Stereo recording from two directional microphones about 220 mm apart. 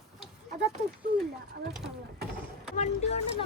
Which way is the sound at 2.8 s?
30° left (ahead or behind).